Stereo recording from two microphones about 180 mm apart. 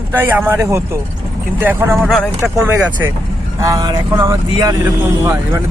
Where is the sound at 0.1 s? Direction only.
10° right (ahead or behind).